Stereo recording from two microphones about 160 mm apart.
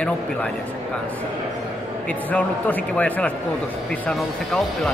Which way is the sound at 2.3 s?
10° left (ahead or behind).